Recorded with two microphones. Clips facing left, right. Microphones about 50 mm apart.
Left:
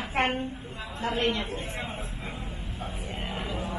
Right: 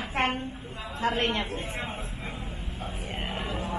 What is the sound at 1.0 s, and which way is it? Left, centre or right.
Speech, right.